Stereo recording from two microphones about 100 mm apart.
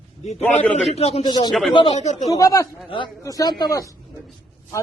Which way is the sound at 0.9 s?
90° left.